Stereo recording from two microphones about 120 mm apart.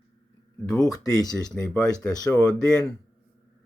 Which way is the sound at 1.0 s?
30° left (ahead or behind).